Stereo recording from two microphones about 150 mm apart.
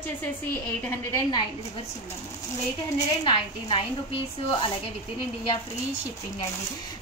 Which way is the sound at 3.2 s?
35° left (ahead or behind).